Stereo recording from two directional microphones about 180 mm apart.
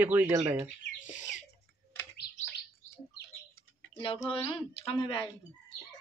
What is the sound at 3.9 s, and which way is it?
Speech, 30° left (ahead or behind).